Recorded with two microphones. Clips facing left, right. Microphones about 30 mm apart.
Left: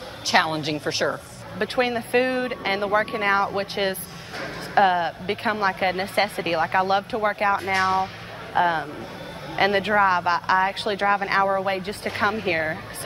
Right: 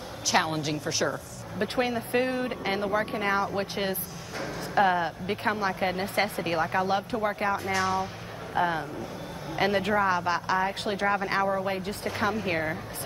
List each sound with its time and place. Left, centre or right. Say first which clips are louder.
0.3 s speech: left 5 dB; left